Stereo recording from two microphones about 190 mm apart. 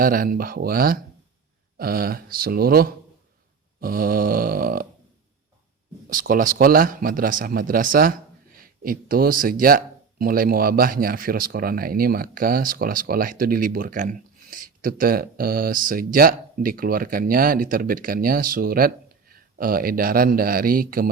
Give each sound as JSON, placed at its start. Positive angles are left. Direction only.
{"t": 0.0, "sound": "speech", "side_deg": -50}
{"t": 6.1, "sound": "speech", "side_deg": -45}